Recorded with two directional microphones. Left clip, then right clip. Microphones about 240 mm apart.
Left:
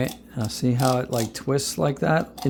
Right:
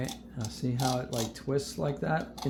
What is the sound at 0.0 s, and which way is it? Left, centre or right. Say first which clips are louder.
Speech: left 10 dB; left.